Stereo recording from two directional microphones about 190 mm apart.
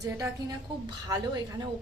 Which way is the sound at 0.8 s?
20° right (ahead or behind).